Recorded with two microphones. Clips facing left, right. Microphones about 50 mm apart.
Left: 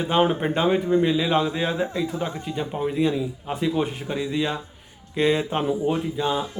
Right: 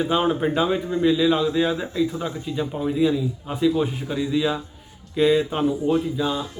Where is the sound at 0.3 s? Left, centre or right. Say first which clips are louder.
Right 2 dB; centre.